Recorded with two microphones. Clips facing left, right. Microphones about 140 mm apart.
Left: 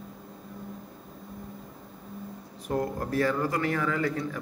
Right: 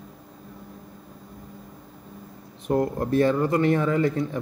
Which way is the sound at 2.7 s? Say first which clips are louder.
Right 6 dB; 25° right (ahead or behind).